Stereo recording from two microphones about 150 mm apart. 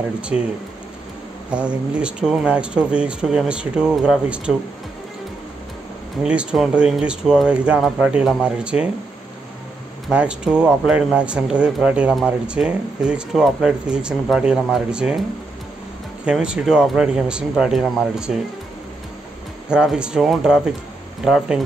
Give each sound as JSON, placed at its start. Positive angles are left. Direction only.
{"t": 1.5, "sound": "speech", "side_deg": -5}
{"t": 6.2, "sound": "speech", "side_deg": -5}
{"t": 10.0, "sound": "speech", "side_deg": -5}
{"t": 16.3, "sound": "speech", "side_deg": -5}
{"t": 19.7, "sound": "speech", "side_deg": -5}